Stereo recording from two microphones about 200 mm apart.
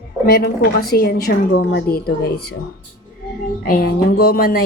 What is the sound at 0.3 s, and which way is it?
A woman's voice, 50° left (ahead or behind).